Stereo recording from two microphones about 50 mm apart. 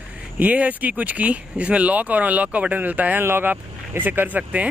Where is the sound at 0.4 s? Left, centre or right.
Right.